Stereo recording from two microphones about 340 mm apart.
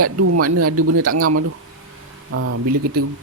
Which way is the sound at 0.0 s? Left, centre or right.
Right.